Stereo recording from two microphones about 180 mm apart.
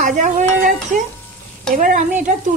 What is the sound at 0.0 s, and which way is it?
Speech, 50° right (ahead or behind).